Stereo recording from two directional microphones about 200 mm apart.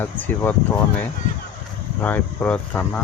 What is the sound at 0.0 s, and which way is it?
Speech, 10° left (ahead or behind).